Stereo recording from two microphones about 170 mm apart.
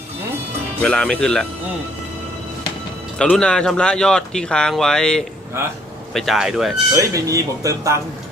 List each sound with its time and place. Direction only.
0.8 s speech: 5° left (ahead or behind)
3.2 s speech: 5° left (ahead or behind)
6.9 s speech: 20° right (ahead or behind)